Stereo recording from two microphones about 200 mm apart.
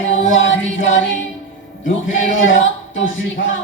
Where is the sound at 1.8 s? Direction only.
75° left (ahead or behind).